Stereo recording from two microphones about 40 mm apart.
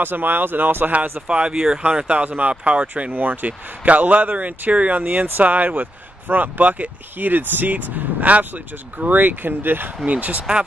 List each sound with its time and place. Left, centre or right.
0.0 s speech: right
1.2 s speech: right
1.5 s speech: centre
1.9 s speech: right
2.1 s speech: right
3.1 s speech: right
5.0 s speech: right
5.4 s speech: right
10.0 s speech: right